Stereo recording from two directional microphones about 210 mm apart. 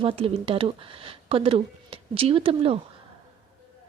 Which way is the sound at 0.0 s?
25° right (ahead or behind).